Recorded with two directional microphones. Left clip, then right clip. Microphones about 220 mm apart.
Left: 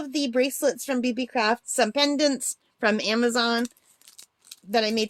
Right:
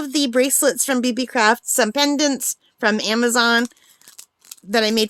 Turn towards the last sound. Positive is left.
turn(degrees=-30)  # may be behind; listen again after turning